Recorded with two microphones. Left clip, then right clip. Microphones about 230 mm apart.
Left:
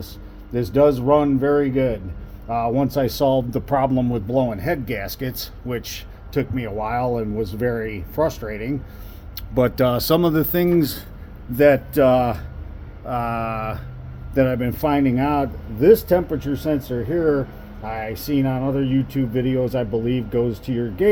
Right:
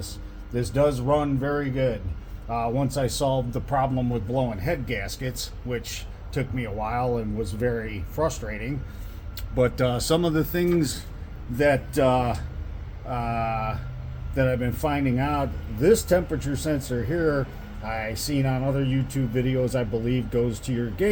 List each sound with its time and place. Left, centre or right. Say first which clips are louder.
0.5 s speech: left 6 dB; left